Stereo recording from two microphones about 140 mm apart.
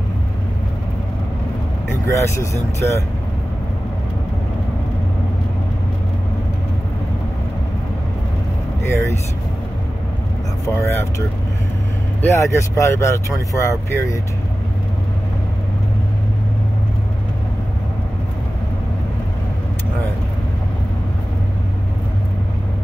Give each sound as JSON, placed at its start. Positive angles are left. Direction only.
{"t": 2.0, "sound": "speech", "side_deg": 20}
{"t": 10.6, "sound": "speech", "side_deg": 20}